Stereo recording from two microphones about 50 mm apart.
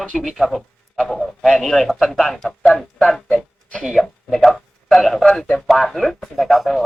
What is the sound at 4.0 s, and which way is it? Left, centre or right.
Speech, centre.